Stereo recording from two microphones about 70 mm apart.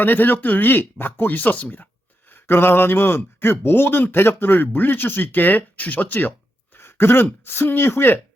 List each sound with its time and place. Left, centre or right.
0.0 s speech: left
6.7 s throat clearing: left
7.4 s speech: left